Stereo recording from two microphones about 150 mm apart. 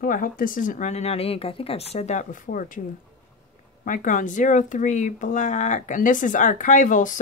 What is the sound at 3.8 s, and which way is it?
Speech, 60° left (ahead or behind).